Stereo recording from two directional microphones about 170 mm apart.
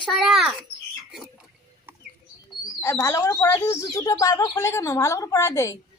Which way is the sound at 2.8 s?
15° left (ahead or behind).